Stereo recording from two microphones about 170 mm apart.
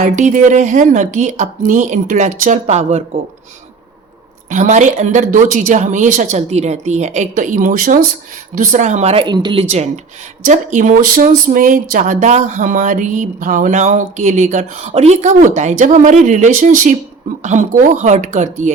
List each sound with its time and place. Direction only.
0.0 s speech: 50° right (ahead or behind)
4.4 s speech: 45° right (ahead or behind)
9.2 s speech: 25° right (ahead or behind); by 18.7 s 45° right (ahead or behind)